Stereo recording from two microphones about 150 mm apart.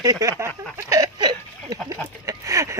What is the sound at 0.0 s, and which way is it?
Speech, 25° right (ahead or behind).